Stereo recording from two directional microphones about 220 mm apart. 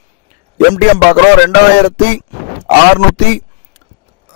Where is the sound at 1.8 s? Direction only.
50° left (ahead or behind).